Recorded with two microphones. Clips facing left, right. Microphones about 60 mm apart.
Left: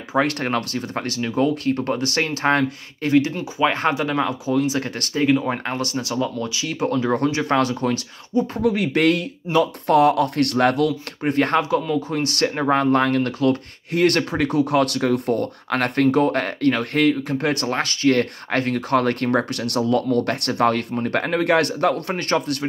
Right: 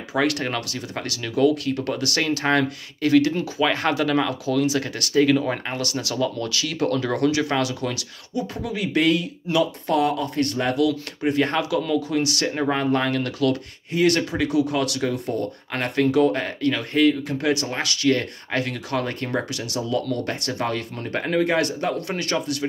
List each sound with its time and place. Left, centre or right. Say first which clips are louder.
0.1 s speech: left 2 dB; left
5.2 s speech: left 1 dB; left
8.6 s speech: left 2 dB; left
13.9 s speech: left 2 dB; left